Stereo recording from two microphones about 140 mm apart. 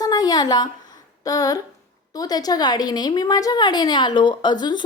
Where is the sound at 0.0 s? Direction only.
30° left (ahead or behind).